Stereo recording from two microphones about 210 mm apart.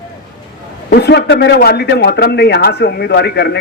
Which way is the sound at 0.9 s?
50° left (ahead or behind).